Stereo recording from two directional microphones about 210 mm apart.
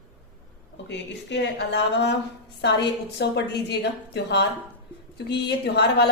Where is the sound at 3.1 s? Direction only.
50° left (ahead or behind).